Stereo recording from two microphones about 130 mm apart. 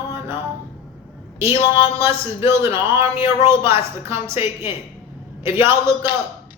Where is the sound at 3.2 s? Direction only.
20° right (ahead or behind).